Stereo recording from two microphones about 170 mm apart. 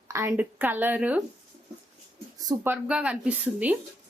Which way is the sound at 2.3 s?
20° right (ahead or behind).